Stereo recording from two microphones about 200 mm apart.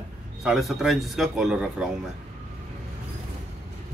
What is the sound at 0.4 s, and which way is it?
Speech, centre (ahead or behind).